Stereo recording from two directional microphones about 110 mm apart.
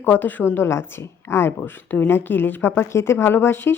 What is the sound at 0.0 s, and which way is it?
A woman's voice, 15° left (ahead or behind).